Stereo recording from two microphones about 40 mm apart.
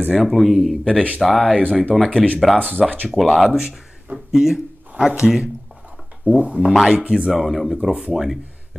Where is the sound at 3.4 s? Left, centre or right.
Centre.